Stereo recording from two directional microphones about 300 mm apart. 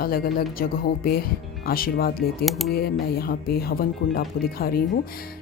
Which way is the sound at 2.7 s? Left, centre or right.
Left.